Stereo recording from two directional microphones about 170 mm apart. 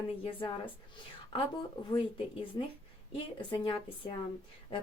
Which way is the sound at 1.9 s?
30° left (ahead or behind).